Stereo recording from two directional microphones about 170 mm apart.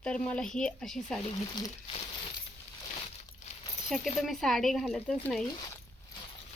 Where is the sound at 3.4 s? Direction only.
45° left (ahead or behind).